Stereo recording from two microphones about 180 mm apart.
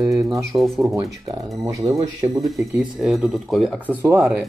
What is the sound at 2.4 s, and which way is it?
Speech, centre (ahead or behind).